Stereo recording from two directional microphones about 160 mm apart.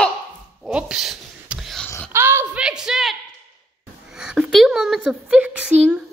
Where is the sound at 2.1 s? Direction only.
15° right (ahead or behind).